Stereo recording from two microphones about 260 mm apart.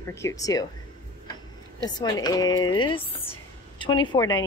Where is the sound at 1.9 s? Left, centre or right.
Centre.